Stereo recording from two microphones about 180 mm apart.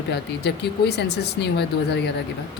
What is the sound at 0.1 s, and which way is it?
A woman's voice, 65° left (ahead or behind).